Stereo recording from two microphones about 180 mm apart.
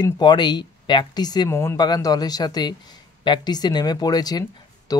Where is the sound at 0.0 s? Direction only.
25° left (ahead or behind).